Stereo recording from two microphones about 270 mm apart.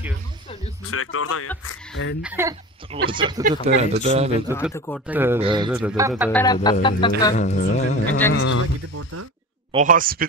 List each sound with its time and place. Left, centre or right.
0.8 s speech: left
1.7 s speech: left
2.2 s speech: centre; by 4.3 s right
4.5 s speech: centre
4.7 s music: centre
5.0 s speech: centre
5.7 s speech: centre
6.3 s music: centre
7.3 s music: left
8.3 s speech: left
8.9 s speech: right
9.7 s speech: right